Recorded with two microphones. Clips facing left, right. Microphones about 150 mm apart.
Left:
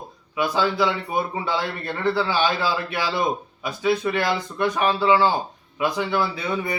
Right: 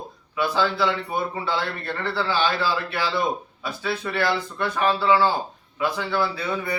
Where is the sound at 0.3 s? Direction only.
15° left (ahead or behind).